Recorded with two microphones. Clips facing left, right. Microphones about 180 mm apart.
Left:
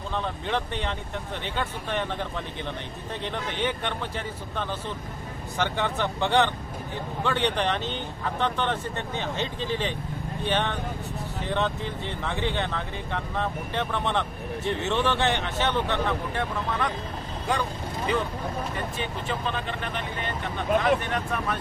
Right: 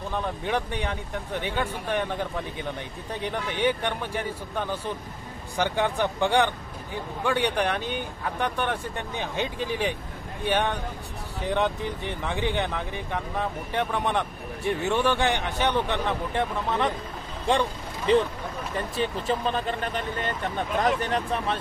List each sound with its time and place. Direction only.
0.1 s speech: 10° right (ahead or behind)
18.9 s speech: 40° right (ahead or behind)